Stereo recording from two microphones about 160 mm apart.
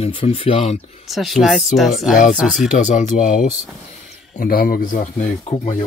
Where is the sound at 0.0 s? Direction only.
35° left (ahead or behind).